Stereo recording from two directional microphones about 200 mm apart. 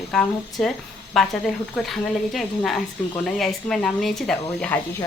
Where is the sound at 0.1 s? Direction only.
Centre (ahead or behind).